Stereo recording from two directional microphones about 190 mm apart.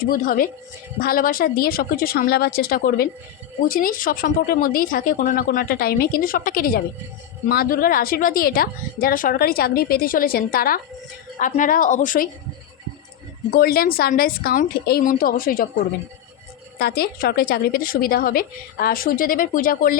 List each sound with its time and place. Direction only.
0.0 s a woman's voice: 45° left (ahead or behind)
13.5 s a woman's voice: 50° left (ahead or behind)
16.7 s a woman's voice: 55° left (ahead or behind)